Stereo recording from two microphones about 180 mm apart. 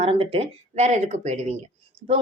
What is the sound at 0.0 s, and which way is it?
A woman's voice, 30° right (ahead or behind).